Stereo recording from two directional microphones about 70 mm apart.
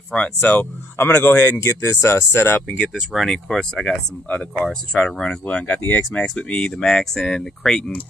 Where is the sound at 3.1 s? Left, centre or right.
Centre.